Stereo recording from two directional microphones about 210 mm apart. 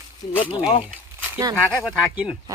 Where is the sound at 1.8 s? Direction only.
Centre (ahead or behind).